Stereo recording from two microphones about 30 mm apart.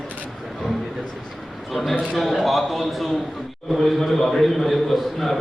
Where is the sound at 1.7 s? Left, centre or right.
Centre.